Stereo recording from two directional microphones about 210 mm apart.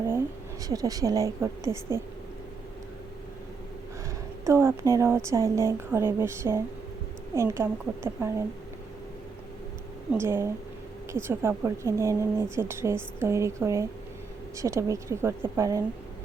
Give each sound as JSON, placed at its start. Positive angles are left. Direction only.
{"t": 0.7, "sound": "a woman's voice", "side_deg": -15}
{"t": 4.4, "sound": "a woman's voice", "side_deg": -15}
{"t": 10.1, "sound": "a woman's voice", "side_deg": -10}